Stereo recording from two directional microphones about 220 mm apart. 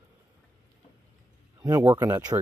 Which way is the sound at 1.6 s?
15° right (ahead or behind).